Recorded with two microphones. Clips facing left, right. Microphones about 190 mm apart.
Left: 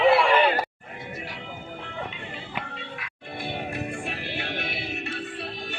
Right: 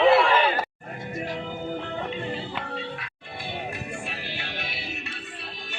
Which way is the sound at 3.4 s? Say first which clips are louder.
Left 3 dB; 55° left (ahead or behind).